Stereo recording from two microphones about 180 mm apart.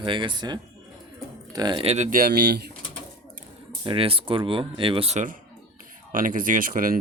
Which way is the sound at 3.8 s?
30° right (ahead or behind).